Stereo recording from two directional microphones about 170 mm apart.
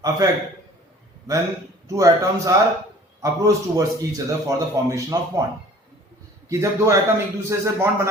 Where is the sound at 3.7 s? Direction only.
20° right (ahead or behind).